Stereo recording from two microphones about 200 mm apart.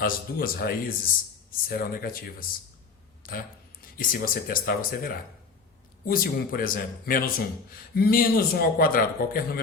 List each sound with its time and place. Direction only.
0.0 s speech: 45° left (ahead or behind)